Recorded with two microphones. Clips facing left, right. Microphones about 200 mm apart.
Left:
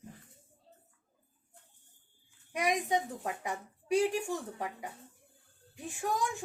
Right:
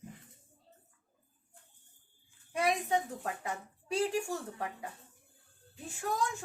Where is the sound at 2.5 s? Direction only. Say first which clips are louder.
Even; 15° left (ahead or behind).